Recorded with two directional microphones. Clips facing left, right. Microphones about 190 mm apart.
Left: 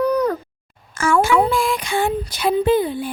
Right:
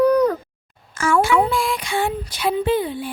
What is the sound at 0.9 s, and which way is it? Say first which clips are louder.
Speech: left 1 dB; 45° left (ahead or behind).